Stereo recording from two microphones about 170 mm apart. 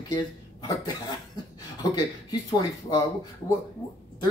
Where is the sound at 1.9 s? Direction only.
20° left (ahead or behind).